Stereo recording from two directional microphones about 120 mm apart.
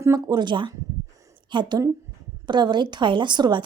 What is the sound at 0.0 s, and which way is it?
A woman's voice, 30° right (ahead or behind).